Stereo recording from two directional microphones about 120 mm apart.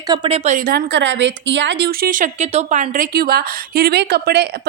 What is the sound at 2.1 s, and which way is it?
Speech, 80° right.